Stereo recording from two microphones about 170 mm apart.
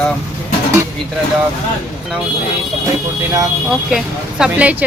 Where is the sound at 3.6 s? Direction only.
5° right (ahead or behind).